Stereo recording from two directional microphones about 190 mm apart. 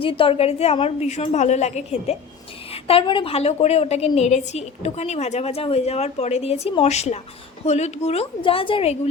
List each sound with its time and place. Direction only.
0.0 s a woman's voice: 30° left (ahead or behind)